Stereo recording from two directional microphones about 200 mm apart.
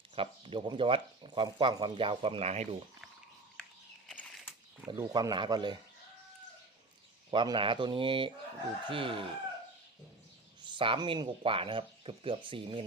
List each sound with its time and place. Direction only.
0.2 s speech: 25° right (ahead or behind)
3.6 s a sound: 5° left (ahead or behind)
4.9 s speech: 20° right (ahead or behind)
7.3 s speech: 25° right (ahead or behind)
10.6 s speech: 25° right (ahead or behind)